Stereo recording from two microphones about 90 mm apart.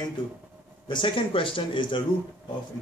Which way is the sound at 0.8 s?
65° left (ahead or behind).